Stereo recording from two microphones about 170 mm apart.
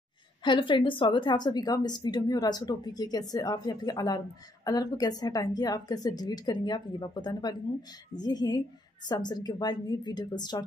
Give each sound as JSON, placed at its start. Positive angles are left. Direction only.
{"t": 0.4, "sound": "a woman's voice", "side_deg": 30}